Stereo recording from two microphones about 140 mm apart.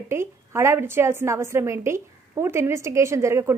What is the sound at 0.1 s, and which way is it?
A woman's voice, 20° right (ahead or behind).